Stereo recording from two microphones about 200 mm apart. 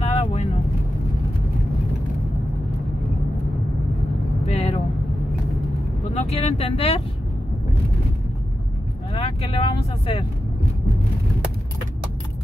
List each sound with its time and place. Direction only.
0.0 s vehicle: 30° left (ahead or behind)
4.5 s vehicle: 30° left (ahead or behind)
6.1 s speech: 30° left (ahead or behind)
9.1 s speech: 30° left (ahead or behind)